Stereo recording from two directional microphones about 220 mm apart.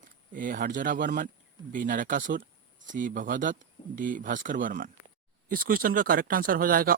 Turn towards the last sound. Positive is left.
turn(degrees=-40)  # may be behind; listen again after turning